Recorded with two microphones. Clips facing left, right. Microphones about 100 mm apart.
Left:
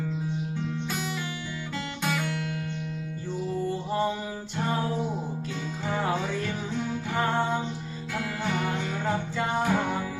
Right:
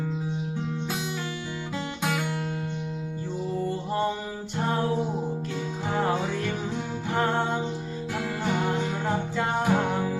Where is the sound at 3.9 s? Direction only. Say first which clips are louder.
Even; centre (ahead or behind).